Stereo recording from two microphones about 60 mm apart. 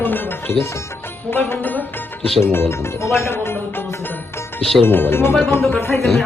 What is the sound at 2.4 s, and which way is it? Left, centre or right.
Speech, left.